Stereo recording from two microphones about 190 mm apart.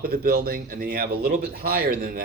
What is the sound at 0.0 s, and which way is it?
Speech, 50° right (ahead or behind).